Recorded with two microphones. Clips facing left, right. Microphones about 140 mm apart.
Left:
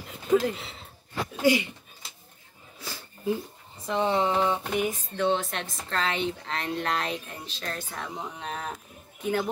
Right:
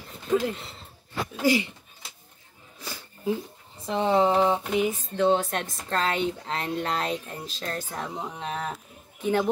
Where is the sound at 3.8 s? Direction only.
30° right (ahead or behind).